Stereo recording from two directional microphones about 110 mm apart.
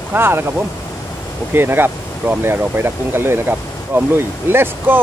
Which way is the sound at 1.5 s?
20° right (ahead or behind).